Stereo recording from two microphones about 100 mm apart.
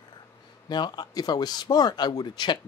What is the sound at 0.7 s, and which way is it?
Speech, 45° left (ahead or behind).